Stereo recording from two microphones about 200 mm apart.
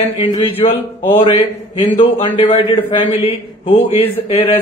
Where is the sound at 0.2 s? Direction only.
25° left (ahead or behind).